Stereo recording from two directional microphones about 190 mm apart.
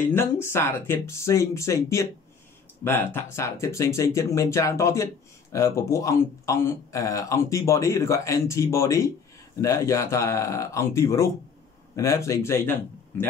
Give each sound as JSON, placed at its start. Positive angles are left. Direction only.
{"t": 0.0, "sound": "a man's voice", "side_deg": 10}